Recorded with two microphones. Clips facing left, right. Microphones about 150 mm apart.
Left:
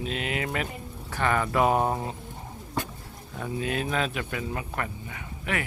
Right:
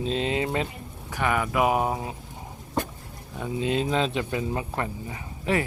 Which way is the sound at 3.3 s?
15° right (ahead or behind).